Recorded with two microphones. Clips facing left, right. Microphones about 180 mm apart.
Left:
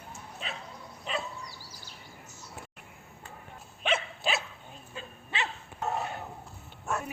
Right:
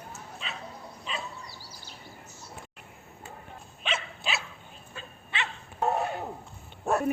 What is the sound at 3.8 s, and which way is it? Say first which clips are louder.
Dog: left 4 dB; 50° left (ahead or behind).